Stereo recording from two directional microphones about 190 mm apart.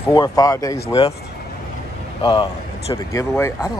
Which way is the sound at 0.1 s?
20° left (ahead or behind).